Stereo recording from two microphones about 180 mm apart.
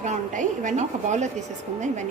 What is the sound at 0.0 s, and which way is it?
A woman's voice, 40° right (ahead or behind).